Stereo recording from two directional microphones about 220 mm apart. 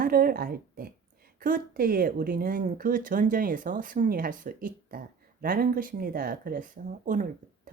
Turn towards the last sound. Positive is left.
turn(degrees=-35)  # may be behind; listen again after turning